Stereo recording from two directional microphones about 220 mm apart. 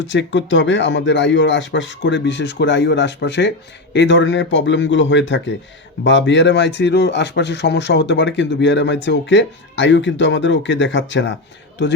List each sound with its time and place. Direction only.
0.0 s speech: 55° left (ahead or behind)